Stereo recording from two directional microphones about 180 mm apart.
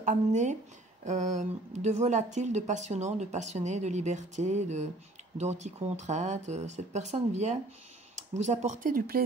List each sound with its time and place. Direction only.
0.0 s speech: 40° right (ahead or behind)